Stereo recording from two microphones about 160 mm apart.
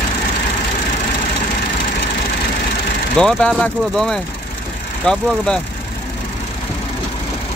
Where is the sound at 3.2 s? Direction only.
5° left (ahead or behind).